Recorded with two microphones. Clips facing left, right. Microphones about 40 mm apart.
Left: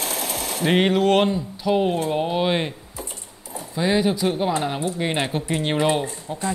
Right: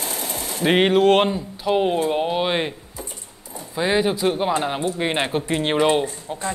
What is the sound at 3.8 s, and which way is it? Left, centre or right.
Speech, centre.